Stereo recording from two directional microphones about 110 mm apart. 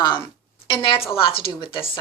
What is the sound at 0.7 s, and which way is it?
Speech, 50° left (ahead or behind).